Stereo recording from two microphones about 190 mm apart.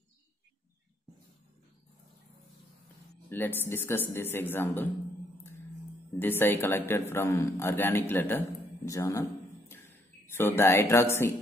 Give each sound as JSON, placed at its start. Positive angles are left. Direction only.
{"t": 3.3, "sound": "speech", "side_deg": 10}
{"t": 6.1, "sound": "speech", "side_deg": 10}
{"t": 10.3, "sound": "speech", "side_deg": 15}